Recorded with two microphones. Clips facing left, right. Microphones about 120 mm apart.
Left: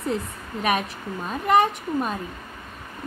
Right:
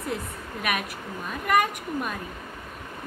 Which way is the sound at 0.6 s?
30° left (ahead or behind).